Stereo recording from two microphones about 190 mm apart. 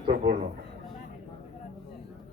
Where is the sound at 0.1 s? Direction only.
50° right (ahead or behind).